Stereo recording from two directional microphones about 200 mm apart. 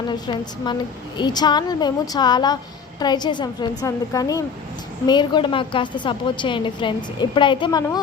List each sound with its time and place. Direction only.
0.1 s a woman's voice: 20° left (ahead or behind)